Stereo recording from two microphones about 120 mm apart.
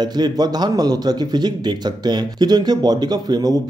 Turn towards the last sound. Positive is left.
turn(degrees=-35)  # may be behind; listen again after turning